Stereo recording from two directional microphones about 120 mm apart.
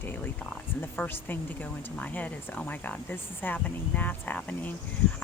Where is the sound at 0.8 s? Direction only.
15° left (ahead or behind).